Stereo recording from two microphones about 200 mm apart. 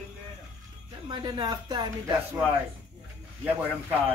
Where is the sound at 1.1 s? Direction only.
20° right (ahead or behind).